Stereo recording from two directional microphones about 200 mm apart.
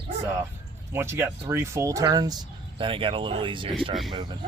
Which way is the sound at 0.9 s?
10° right (ahead or behind).